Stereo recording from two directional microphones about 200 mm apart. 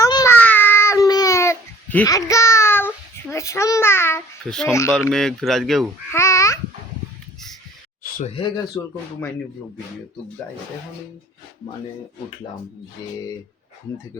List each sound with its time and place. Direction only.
0.0 s baby cry: 20° left (ahead or behind)
0.3 s a sound: 10° left (ahead or behind)
3.3 s a child's voice: 15° left (ahead or behind)
6.1 s babbling: 15° left (ahead or behind)
8.4 s speech: 20° left (ahead or behind)
13.0 s speech: 20° left (ahead or behind)